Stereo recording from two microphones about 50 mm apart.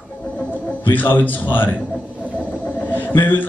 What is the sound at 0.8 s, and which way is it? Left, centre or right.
Speech, left.